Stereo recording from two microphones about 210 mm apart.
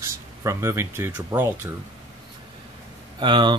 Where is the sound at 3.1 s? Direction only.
20° right (ahead or behind).